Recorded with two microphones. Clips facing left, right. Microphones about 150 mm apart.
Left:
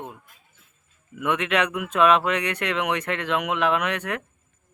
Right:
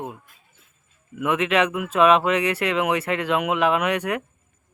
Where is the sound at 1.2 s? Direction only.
5° right (ahead or behind).